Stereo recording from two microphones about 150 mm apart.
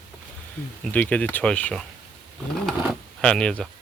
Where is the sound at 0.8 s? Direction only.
10° left (ahead or behind).